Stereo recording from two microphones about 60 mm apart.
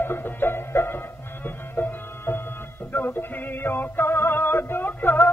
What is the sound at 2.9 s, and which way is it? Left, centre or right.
Male singing, left.